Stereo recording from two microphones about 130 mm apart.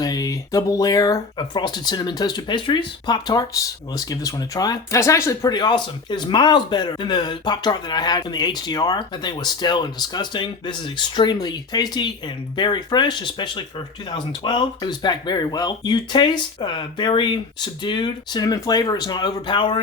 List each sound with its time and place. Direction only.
0.0 s speech: 30° left (ahead or behind)